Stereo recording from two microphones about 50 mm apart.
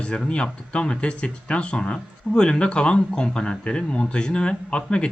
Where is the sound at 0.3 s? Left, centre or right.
Left.